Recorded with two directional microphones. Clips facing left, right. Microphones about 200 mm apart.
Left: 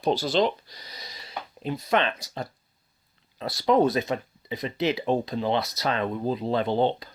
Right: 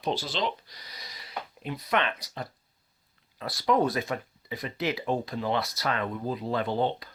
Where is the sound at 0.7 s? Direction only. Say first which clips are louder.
Left 3 dB; 25° left (ahead or behind).